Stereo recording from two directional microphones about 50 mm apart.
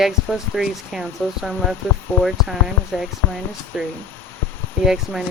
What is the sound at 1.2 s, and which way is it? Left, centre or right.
Speech, centre.